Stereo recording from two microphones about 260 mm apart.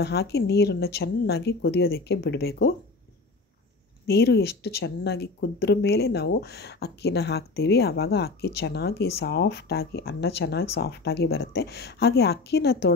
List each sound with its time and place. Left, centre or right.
0.0 s speech: left
4.1 s speech: left